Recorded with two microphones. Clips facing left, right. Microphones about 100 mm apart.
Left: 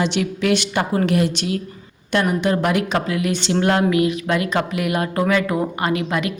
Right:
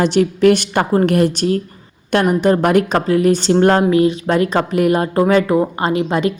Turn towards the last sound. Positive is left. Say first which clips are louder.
# right 5 dB
turn(degrees=-30)  # may be behind; listen again after turning